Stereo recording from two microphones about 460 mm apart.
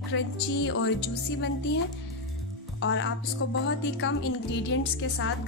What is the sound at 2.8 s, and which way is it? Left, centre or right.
Speech, left.